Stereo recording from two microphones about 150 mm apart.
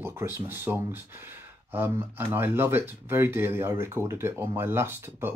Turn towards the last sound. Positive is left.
turn(degrees=-15)  # may be behind; listen again after turning